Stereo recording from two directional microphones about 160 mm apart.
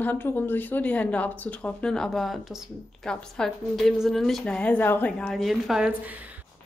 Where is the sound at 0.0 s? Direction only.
10° left (ahead or behind).